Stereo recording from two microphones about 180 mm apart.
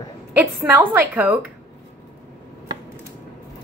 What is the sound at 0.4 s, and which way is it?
A woman's voice, 10° right (ahead or behind).